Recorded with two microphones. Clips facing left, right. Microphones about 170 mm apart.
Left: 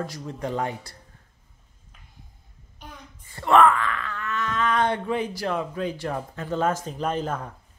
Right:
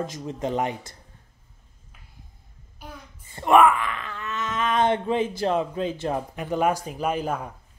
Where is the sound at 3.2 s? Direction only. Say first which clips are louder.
Right 1 dB; 20° right (ahead or behind).